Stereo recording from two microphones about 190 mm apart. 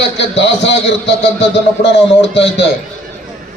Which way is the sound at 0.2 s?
65° left (ahead or behind).